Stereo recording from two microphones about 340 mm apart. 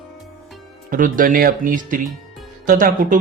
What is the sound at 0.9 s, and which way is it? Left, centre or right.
Speech, right.